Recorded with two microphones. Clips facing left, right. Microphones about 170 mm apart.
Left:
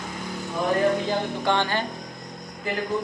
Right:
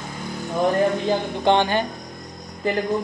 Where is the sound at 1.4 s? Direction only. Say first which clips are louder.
Right 8 dB; 20° right (ahead or behind).